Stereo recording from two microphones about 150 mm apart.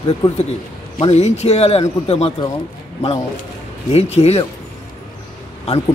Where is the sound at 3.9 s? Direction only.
45° left (ahead or behind).